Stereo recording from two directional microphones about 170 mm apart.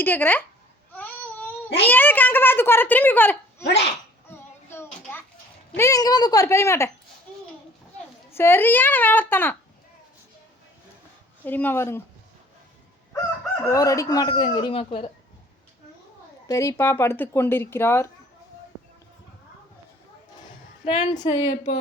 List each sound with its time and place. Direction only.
0.0 s speech: 10° left (ahead or behind)
0.9 s babbling: 10° left (ahead or behind)
1.9 s speech: 10° left (ahead or behind)
3.6 s speech: 90° left
4.3 s a sound: 15° left (ahead or behind)
5.7 s speech: 20° left (ahead or behind)
8.3 s speech: 15° left (ahead or behind)
11.4 s speech: 10° left (ahead or behind)
13.7 s speech: 20° left (ahead or behind)
16.5 s speech: 15° left (ahead or behind)
20.8 s speech: 30° left (ahead or behind)